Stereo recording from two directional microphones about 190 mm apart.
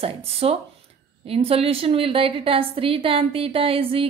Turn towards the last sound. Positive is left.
turn(degrees=-30)  # may be behind; listen again after turning